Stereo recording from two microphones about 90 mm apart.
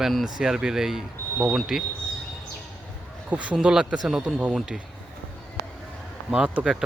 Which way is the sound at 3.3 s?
15° right (ahead or behind).